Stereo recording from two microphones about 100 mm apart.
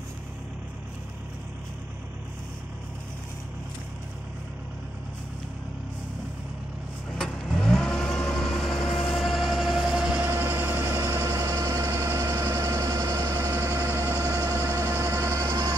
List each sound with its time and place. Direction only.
7.2 s vehicle: 5° left (ahead or behind)
10.2 s vehicle: 20° right (ahead or behind)